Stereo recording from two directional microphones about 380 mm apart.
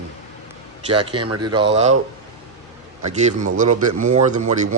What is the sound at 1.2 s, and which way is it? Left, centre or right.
Speech, right.